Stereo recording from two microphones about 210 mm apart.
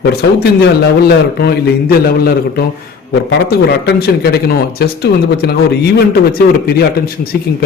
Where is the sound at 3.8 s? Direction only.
50° left (ahead or behind).